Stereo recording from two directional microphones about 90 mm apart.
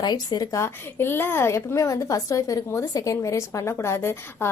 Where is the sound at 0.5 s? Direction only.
30° left (ahead or behind).